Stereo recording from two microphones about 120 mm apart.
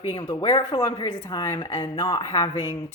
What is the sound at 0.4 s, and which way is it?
A woman's voice, 45° left (ahead or behind).